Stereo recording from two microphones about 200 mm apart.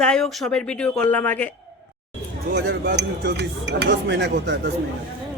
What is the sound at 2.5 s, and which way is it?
Speech, 60° right (ahead or behind).